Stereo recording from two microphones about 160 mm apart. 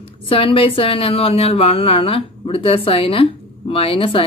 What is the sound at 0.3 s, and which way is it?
Speech, 35° left (ahead or behind).